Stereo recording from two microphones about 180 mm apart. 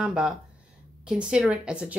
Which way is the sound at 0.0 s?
Centre (ahead or behind).